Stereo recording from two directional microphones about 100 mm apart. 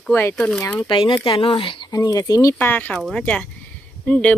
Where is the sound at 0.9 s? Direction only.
55° left (ahead or behind).